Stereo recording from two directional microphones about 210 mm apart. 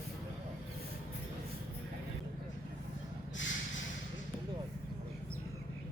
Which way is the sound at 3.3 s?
65° left (ahead or behind).